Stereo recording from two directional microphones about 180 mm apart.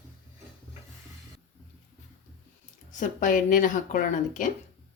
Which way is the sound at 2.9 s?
45° left (ahead or behind).